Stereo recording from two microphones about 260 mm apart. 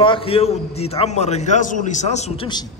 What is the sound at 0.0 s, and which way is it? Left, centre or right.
A man's voice, centre.